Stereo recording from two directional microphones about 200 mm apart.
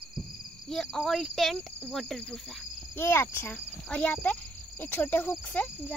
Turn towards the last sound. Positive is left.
turn(degrees=10)  # may be behind; listen again after turning